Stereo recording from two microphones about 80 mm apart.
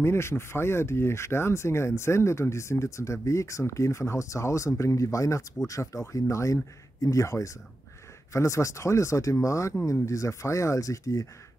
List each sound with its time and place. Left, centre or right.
0.0 s speech: left